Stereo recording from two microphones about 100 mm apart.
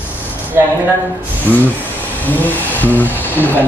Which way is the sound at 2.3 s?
15° left (ahead or behind).